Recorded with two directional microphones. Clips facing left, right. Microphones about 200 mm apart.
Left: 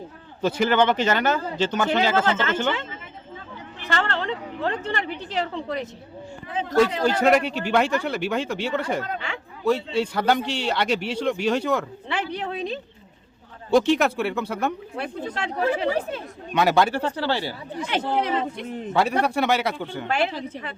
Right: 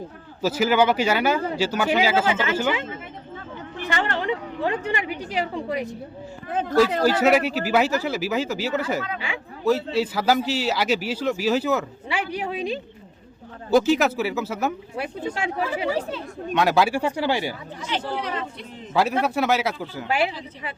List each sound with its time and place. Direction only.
0.4 s a woman's voice: 5° right (ahead or behind)
3.8 s a woman's voice: 15° right (ahead or behind)
7.0 s speech: 5° right (ahead or behind)
15.9 s speech: 55° left (ahead or behind)
16.5 s a woman's voice: centre (ahead or behind)
17.8 s a man's voice: 55° left (ahead or behind)
18.9 s speech: centre (ahead or behind)